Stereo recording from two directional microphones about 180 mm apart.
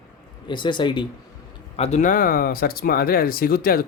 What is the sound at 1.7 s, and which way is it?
Speech, 35° left (ahead or behind).